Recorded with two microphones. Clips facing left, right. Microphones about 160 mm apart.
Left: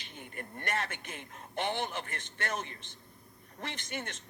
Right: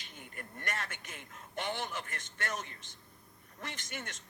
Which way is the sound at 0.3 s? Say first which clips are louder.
Left 5 dB; 60° left (ahead or behind).